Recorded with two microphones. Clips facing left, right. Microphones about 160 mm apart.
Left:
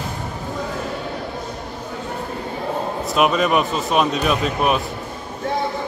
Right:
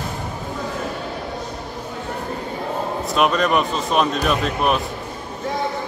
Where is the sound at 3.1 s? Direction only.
5° left (ahead or behind).